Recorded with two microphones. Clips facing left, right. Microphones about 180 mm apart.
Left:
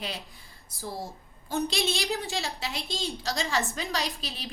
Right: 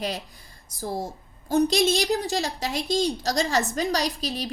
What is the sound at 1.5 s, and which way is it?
A woman's voice, 40° right (ahead or behind).